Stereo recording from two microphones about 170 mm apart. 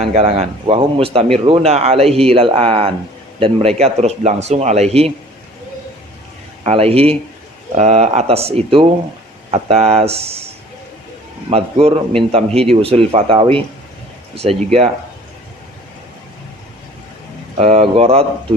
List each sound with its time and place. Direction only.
0.0 s speech: 40° right (ahead or behind)
6.7 s speech: 35° right (ahead or behind)
11.5 s speech: 35° right (ahead or behind)
17.6 s speech: 35° right (ahead or behind)